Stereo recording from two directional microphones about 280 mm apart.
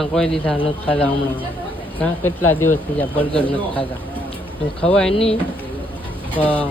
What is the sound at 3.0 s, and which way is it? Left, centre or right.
Speech, centre.